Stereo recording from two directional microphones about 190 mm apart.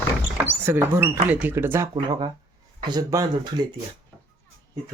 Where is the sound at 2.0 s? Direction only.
25° right (ahead or behind).